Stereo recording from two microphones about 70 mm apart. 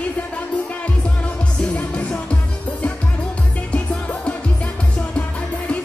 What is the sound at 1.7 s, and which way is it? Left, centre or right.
Music, centre.